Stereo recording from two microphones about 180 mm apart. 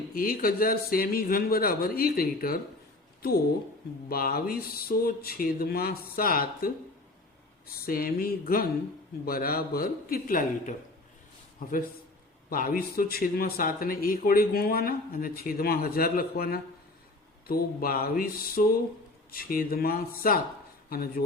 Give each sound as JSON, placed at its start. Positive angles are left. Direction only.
{"t": 0.1, "sound": "a man's voice", "side_deg": 55}
{"t": 4.1, "sound": "a man's voice", "side_deg": 55}
{"t": 7.9, "sound": "a man's voice", "side_deg": 55}